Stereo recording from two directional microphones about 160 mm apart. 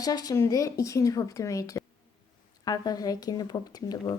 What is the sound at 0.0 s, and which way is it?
Speech, 25° left (ahead or behind).